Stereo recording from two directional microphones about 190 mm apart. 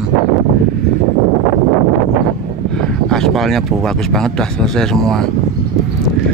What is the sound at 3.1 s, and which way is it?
Speech, centre (ahead or behind).